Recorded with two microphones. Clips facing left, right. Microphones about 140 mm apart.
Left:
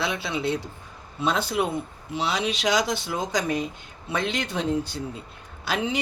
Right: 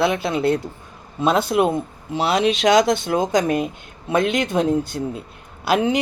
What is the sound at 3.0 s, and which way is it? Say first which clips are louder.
A man's voice: right 8 dB; 55° right (ahead or behind).